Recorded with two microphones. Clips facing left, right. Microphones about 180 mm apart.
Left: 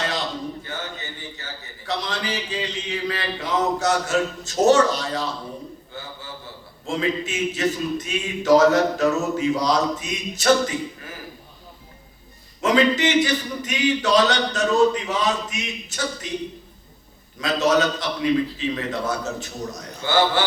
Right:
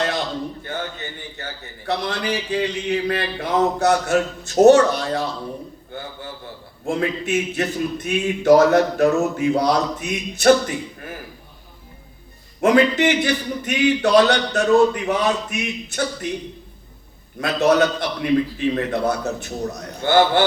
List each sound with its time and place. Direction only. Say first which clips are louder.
0.6 s a sound: right 4 dB; 55° right (ahead or behind)
1.9 s a man's voice: right 4 dB; 55° right (ahead or behind)
12.5 s a man's voice: right 3 dB; 55° right (ahead or behind)
17.4 s a man's voice: right 3 dB; 55° right (ahead or behind)